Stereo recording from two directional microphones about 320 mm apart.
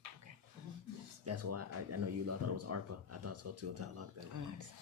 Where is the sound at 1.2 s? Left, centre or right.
Right.